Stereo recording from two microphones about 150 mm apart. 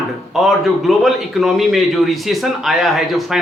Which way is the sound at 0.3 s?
Centre (ahead or behind).